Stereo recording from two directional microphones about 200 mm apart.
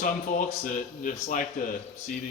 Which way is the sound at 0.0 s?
40° left (ahead or behind).